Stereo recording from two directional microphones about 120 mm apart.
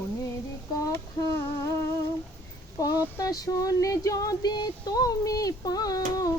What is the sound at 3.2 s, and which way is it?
Female singing, 30° left (ahead or behind).